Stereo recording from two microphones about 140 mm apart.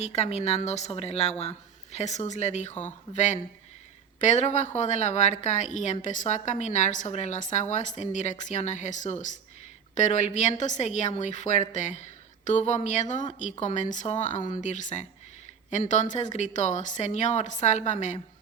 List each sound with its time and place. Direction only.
0.0 s a woman's voice: 50° left (ahead or behind)